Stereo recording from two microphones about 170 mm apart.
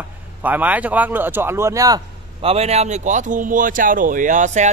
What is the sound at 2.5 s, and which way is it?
Speech, 40° right (ahead or behind).